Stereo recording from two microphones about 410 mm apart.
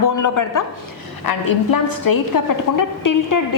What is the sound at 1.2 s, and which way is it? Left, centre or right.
A woman's voice, left.